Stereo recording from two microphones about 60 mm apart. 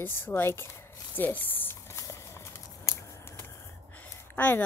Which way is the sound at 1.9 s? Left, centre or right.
Left.